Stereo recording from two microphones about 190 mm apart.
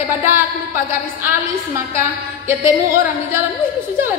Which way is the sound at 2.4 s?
15° right (ahead or behind).